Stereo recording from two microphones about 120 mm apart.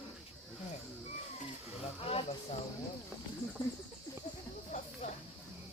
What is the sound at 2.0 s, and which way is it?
Snake, 55° left (ahead or behind).